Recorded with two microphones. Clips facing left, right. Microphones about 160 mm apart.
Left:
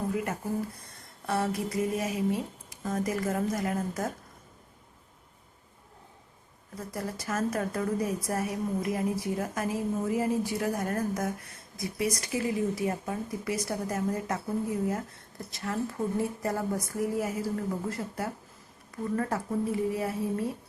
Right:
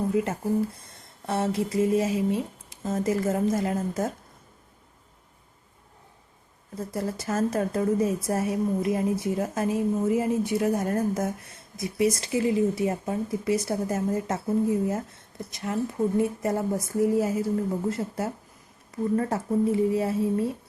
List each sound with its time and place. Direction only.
1.3 s a woman's voice: 25° right (ahead or behind)
6.7 s a woman's voice: 25° right (ahead or behind)